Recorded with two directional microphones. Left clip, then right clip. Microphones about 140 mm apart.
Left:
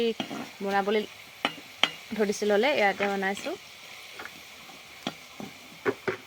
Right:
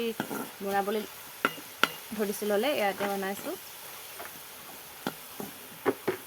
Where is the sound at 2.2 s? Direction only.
25° left (ahead or behind).